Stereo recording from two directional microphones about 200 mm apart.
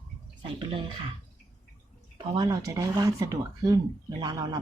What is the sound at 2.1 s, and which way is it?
Speech, 20° right (ahead or behind).